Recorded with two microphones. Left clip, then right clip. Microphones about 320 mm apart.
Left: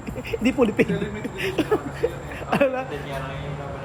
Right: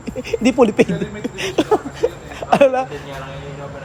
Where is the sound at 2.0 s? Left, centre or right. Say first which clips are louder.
Right 5 dB; centre.